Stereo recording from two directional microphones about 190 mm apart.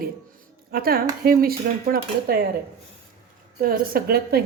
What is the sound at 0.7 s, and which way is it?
Speech, 50° right (ahead or behind).